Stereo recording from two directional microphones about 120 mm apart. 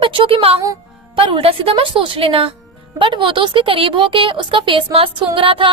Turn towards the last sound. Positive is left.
turn(degrees=-45)  # may be behind; listen again after turning